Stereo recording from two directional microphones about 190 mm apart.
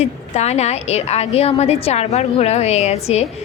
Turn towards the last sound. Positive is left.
turn(degrees=35)  # may be behind; listen again after turning